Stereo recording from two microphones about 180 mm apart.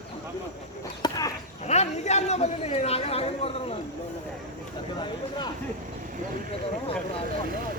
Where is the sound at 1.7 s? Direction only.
40° left (ahead or behind).